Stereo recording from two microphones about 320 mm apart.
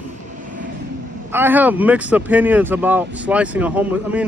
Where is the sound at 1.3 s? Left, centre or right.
Centre.